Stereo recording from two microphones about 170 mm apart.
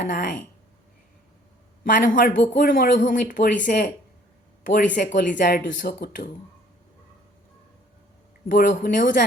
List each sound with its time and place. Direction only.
0.0 s speech: 55° left (ahead or behind)
1.8 s speech: 55° left (ahead or behind)
8.4 s speech: 50° left (ahead or behind)